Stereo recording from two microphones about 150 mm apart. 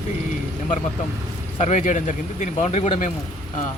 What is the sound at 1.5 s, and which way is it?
Speech, 50° left (ahead or behind).